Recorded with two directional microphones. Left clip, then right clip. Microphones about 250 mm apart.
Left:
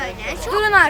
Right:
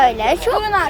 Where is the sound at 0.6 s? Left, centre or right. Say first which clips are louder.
Left 4 dB; centre.